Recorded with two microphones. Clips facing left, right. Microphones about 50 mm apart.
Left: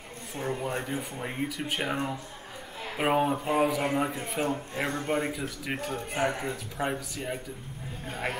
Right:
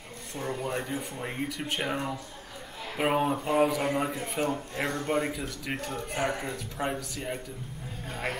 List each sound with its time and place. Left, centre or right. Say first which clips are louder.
0.3 s speech: left 1 dB; centre